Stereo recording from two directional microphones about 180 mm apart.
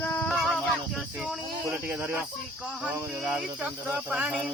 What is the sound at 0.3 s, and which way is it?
Music, centre (ahead or behind).